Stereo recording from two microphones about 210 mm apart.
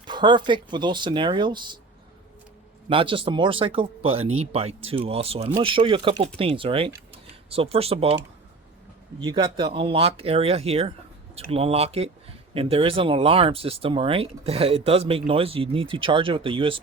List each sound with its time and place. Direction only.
0.0 s speech: 20° right (ahead or behind)
2.9 s speech: 25° right (ahead or behind)
9.2 s speech: 25° right (ahead or behind)